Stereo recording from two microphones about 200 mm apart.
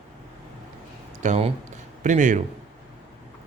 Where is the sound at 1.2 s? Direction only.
35° right (ahead or behind).